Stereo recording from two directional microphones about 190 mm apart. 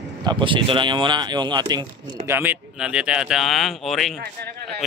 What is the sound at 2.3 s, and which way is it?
Speech, 10° right (ahead or behind).